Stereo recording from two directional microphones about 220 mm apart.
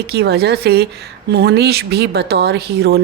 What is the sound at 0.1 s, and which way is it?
A woman's voice, 50° right (ahead or behind).